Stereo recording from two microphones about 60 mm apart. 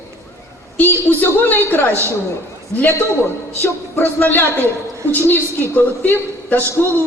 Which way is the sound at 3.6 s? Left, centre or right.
Left.